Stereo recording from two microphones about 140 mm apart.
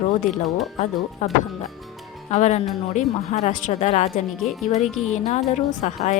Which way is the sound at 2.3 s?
55° left (ahead or behind).